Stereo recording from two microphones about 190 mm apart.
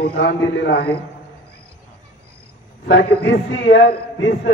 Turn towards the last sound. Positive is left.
turn(degrees=70)  # may be behind; listen again after turning